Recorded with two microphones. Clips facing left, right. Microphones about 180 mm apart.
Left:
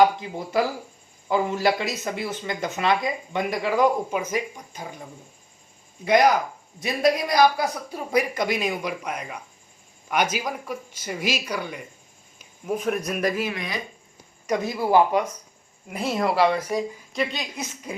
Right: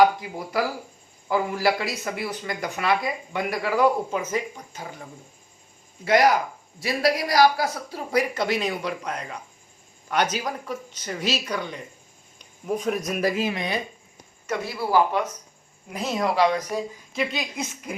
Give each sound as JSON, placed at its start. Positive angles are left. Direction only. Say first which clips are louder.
{"t": 0.0, "sound": "speech", "louder": "even", "side_deg": 25}
{"t": 6.1, "sound": "speech", "louder": "left 1 dB", "side_deg": 20}
{"t": 13.3, "sound": "speech", "louder": "right 2 dB", "side_deg": -25}
{"t": 14.4, "sound": "a woman's voice", "louder": "left 4 dB", "side_deg": 15}